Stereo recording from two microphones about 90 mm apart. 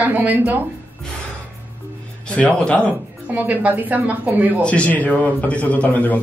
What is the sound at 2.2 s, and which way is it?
Speech, 10° left (ahead or behind).